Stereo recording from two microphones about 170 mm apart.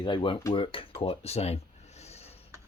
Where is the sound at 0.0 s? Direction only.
25° left (ahead or behind).